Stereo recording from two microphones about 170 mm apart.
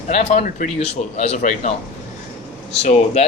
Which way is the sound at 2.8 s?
40° left (ahead or behind).